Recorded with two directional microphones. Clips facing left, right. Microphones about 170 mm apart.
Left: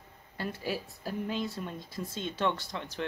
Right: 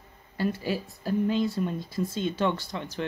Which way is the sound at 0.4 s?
Centre (ahead or behind).